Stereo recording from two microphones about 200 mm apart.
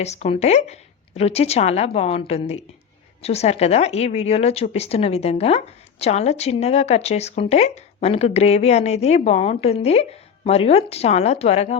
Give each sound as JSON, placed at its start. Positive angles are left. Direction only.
{"t": 0.0, "sound": "speech", "side_deg": 35}